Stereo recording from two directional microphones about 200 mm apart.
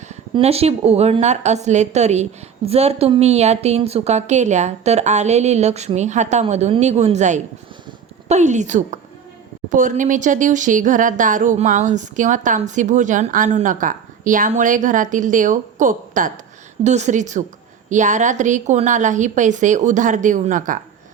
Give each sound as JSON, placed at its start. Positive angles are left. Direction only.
{"t": 0.1, "sound": "speech", "side_deg": -30}